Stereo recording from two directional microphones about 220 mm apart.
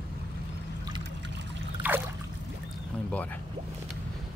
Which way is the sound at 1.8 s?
20° right (ahead or behind).